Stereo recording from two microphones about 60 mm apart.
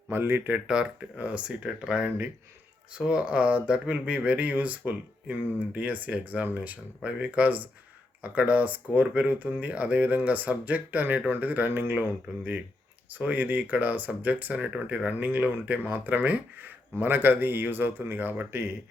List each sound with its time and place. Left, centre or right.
0.1 s speech: right
0.7 s speech: centre; by 18.8 s right